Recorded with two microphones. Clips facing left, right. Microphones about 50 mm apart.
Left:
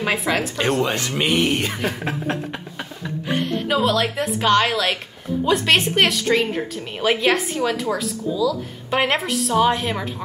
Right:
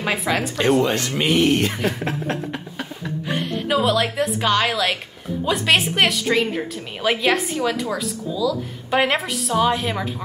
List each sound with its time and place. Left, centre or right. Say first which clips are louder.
0.0 s speech: left 1 dB; centre
0.9 s speech: right 1 dB; centre
1.8 s speech: right 1 dB; centre
2.8 s music: even; centre
5.4 s speech: left 1 dB; centre